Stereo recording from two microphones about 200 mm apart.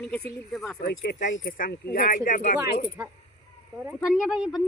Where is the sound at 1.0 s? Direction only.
40° left (ahead or behind).